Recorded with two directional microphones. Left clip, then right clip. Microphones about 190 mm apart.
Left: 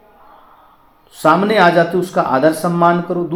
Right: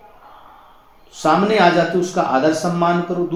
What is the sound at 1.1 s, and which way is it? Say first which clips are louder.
Speech: left 3 dB; 35° left (ahead or behind).